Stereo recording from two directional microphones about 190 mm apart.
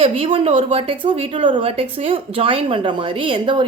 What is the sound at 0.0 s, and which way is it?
A woman's voice, 30° right (ahead or behind).